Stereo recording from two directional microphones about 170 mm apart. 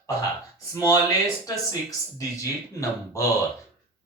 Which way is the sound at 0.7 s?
20° left (ahead or behind).